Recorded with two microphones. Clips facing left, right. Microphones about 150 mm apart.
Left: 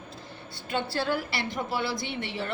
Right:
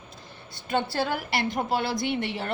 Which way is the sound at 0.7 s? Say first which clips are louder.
Right 2 dB; 45° right (ahead or behind).